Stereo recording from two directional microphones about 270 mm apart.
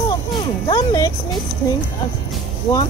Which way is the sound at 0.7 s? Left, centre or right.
Centre.